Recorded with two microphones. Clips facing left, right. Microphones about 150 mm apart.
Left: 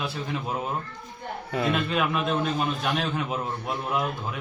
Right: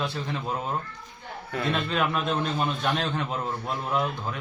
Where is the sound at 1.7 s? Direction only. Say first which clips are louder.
Left 1 dB; 5° left (ahead or behind).